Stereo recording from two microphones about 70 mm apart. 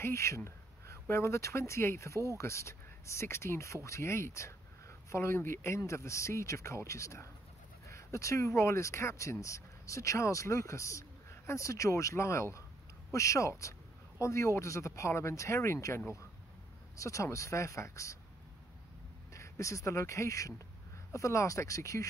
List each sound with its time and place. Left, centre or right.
0.0 s a sound: left
1.1 s speech: left
19.3 s speech: left